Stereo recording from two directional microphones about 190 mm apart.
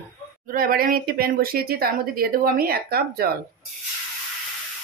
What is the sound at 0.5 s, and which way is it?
Speech, 50° right (ahead or behind).